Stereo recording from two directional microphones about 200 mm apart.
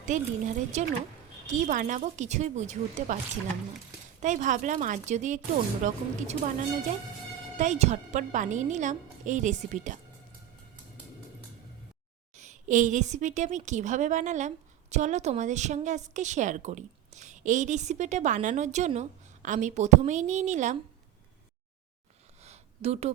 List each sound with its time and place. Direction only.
0.0 s a woman's voice: 40° right (ahead or behind)
4.2 s a woman's voice: 40° right (ahead or behind)
7.5 s a woman's voice: 35° right (ahead or behind)
12.4 s a woman's voice: 40° right (ahead or behind)
22.4 s a sound: 35° right (ahead or behind)